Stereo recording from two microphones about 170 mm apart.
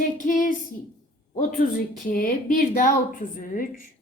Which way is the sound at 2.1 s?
55° left (ahead or behind).